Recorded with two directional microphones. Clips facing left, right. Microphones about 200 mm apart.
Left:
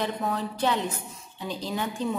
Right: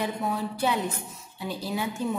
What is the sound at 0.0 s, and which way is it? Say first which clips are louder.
Speech: even; 10° right (ahead or behind).